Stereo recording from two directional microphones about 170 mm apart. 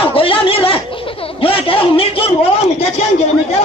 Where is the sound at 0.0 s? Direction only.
35° left (ahead or behind).